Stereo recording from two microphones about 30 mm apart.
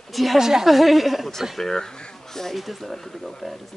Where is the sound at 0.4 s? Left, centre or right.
Centre.